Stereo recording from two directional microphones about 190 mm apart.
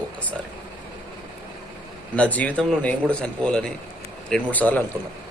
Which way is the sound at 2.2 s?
10° left (ahead or behind).